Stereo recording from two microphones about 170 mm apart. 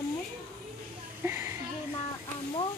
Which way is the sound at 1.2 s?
15° right (ahead or behind).